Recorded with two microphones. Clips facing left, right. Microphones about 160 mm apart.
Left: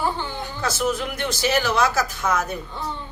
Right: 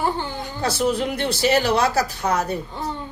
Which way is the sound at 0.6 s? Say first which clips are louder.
Right 3 dB; 35° right (ahead or behind).